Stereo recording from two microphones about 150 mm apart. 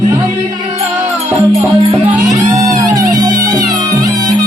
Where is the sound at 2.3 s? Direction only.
25° right (ahead or behind).